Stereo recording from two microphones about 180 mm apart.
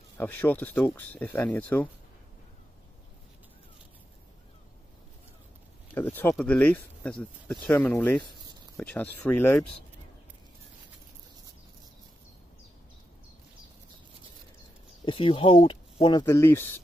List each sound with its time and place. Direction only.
0.2 s speech: 10° left (ahead or behind)
5.9 s a sound: 10° left (ahead or behind)
6.3 s speech: 5° left (ahead or behind)
15.0 s speech: 30° left (ahead or behind); by 16.8 s 10° left (ahead or behind)